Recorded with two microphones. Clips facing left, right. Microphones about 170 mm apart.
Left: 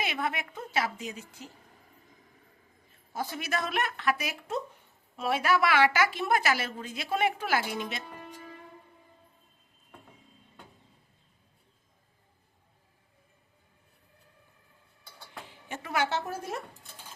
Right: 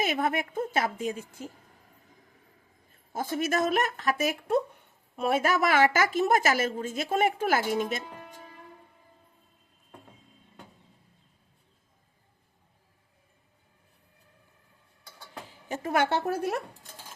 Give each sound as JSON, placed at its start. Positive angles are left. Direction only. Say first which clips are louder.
{"t": 0.0, "sound": "a woman's voice", "louder": "right 5 dB", "side_deg": -45}
{"t": 3.1, "sound": "a woman's voice", "louder": "right 5 dB", "side_deg": -45}
{"t": 15.4, "sound": "speech", "louder": "right 7 dB", "side_deg": -40}